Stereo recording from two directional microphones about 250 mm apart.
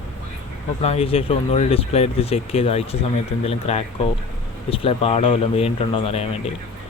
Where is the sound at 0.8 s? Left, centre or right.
Left.